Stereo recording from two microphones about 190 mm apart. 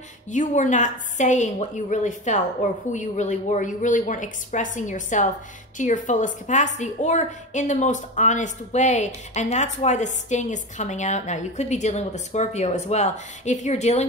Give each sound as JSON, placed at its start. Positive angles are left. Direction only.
{"t": 0.3, "sound": "a woman's voice", "side_deg": 40}